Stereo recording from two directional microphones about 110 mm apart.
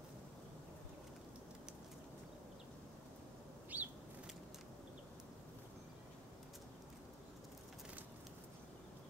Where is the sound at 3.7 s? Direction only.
15° right (ahead or behind).